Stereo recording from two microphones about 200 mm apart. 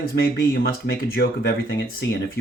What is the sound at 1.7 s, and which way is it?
Speech, 50° left (ahead or behind).